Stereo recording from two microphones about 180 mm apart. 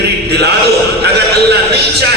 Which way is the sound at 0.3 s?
65° right (ahead or behind).